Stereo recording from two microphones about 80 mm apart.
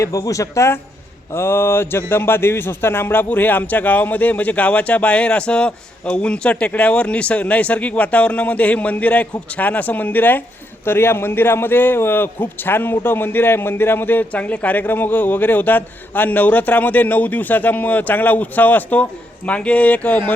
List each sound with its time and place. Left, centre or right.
0.0 s a man's voice: left; by 20.1 s centre